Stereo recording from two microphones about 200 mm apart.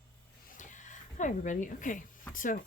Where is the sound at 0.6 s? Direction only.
40° left (ahead or behind).